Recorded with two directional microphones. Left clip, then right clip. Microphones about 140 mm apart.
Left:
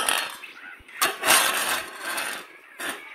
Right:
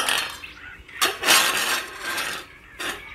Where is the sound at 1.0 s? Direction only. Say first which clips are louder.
Right 2 dB; 25° left (ahead or behind).